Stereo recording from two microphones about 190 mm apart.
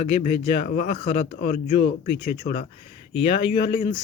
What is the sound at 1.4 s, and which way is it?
Speech, 50° left (ahead or behind).